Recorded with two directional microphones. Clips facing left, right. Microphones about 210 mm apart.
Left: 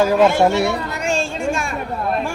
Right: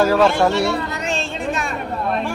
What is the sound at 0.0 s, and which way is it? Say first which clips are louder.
Speech: left 1 dB; 15° left (ahead or behind).